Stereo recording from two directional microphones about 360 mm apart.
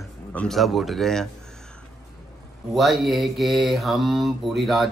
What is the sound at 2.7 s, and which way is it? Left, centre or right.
Mantra, centre.